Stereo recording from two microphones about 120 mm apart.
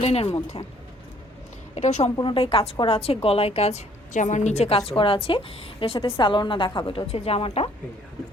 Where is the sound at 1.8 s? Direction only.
70° left (ahead or behind).